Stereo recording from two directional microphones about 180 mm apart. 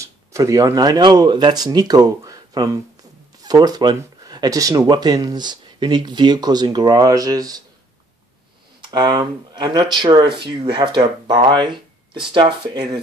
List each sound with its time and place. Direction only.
0.0 s speech: 15° right (ahead or behind)
8.8 s speech: 25° right (ahead or behind)